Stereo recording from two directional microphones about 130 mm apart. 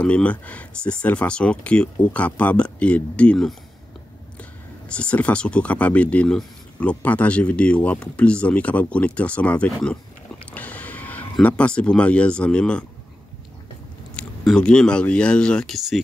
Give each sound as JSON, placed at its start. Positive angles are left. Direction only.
{"t": 0.0, "sound": "speech", "side_deg": 10}
{"t": 10.5, "sound": "music", "side_deg": 10}
{"t": 11.4, "sound": "speech", "side_deg": 10}
{"t": 14.1, "sound": "speech", "side_deg": 5}